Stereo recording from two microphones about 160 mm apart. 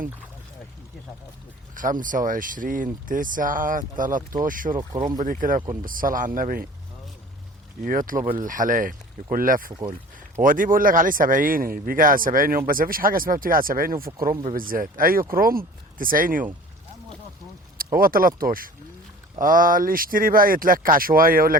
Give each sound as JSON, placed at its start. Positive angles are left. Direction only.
{"t": 1.7, "sound": "speech", "side_deg": -55}
{"t": 7.9, "sound": "speech", "side_deg": -60}
{"t": 17.9, "sound": "speech", "side_deg": -65}